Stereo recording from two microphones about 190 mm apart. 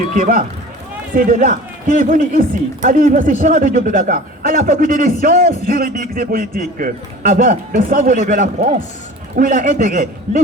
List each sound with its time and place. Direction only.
0.2 s a man's voice: 45° right (ahead or behind)